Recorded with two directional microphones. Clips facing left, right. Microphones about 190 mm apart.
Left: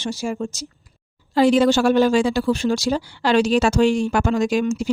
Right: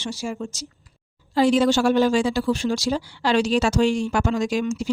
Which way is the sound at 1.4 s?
60° left (ahead or behind).